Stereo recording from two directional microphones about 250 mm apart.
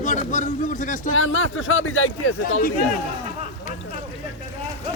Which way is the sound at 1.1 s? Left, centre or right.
Left.